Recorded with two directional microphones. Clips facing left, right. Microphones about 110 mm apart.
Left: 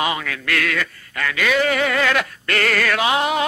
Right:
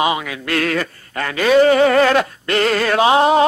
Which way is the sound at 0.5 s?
35° right (ahead or behind).